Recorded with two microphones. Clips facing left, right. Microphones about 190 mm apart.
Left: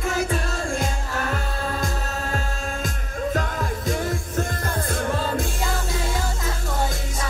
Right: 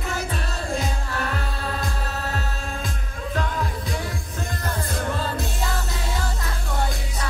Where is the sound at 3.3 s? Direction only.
45° left (ahead or behind).